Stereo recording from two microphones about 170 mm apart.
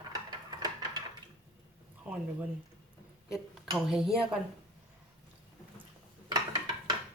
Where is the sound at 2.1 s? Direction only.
10° right (ahead or behind).